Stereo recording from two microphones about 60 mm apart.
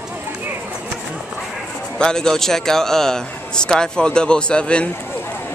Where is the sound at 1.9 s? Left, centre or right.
Centre.